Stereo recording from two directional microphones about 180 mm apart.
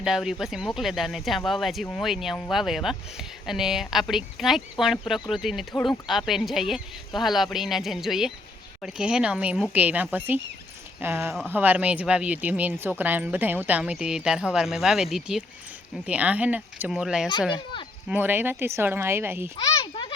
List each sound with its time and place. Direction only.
0.0 s speech: centre (ahead or behind)
5.7 s speech: 10° left (ahead or behind)
6.1 s speech: centre (ahead or behind)
19.6 s a sound: 25° left (ahead or behind)